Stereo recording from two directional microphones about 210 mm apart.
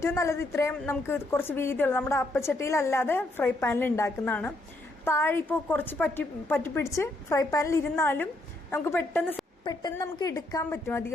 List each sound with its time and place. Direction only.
0.0 s a woman's voice: 15° left (ahead or behind)